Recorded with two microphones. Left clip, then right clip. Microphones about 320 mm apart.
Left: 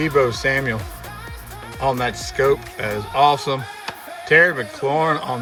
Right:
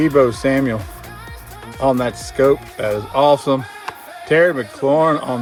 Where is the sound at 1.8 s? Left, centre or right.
Centre.